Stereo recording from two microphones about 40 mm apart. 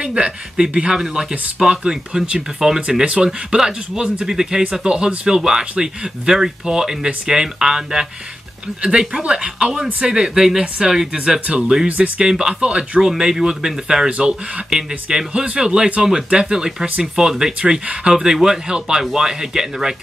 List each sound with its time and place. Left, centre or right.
0.0 s speech: right
0.7 s speech: centre
4.8 s speech: right
9.1 s speech: right
12.2 s speech: centre
15.3 s speech: right
17.6 s speech: right
18.1 s speech: centre